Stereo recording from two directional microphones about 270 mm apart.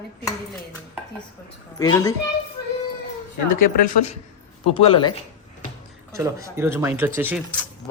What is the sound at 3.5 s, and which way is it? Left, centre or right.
Speech, left.